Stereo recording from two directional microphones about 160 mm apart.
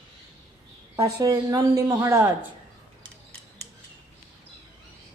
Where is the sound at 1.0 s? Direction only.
20° right (ahead or behind).